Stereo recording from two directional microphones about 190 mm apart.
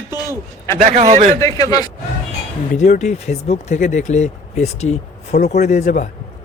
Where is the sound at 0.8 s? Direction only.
40° right (ahead or behind).